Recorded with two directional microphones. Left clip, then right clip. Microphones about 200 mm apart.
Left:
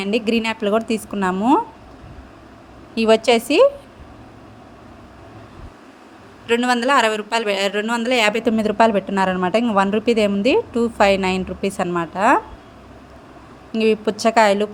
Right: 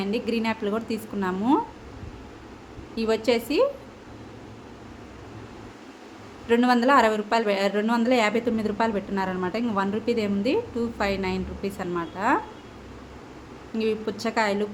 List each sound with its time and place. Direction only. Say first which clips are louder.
0.0 s speech: left 7 dB; 35° left (ahead or behind)
2.9 s speech: left 9 dB; 35° left (ahead or behind)
6.5 s speech: left 3 dB; 35° left (ahead or behind)
13.7 s speech: left 9 dB; 35° left (ahead or behind)